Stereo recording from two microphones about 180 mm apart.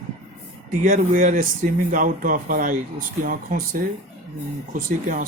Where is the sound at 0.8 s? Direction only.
45° right (ahead or behind).